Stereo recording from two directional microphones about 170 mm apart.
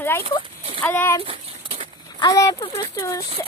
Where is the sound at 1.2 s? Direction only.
35° right (ahead or behind).